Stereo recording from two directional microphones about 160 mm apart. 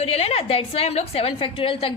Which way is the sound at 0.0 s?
40° left (ahead or behind).